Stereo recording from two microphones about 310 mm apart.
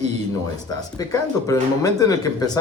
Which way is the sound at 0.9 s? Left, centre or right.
Centre.